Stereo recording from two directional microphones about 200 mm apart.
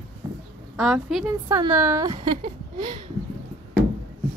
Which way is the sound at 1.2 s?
15° right (ahead or behind).